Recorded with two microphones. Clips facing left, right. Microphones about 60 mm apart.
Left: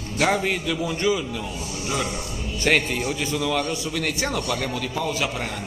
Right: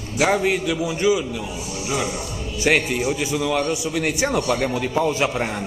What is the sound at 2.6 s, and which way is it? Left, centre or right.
A man's voice, centre.